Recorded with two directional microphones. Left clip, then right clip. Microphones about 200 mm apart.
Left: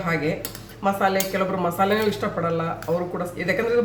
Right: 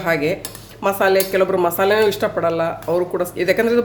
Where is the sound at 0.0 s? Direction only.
55° right (ahead or behind).